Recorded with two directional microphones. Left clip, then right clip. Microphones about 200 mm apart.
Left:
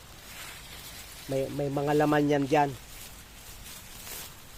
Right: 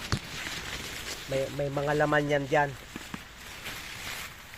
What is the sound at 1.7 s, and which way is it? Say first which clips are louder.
Speech: left 2 dB; 40° left (ahead or behind).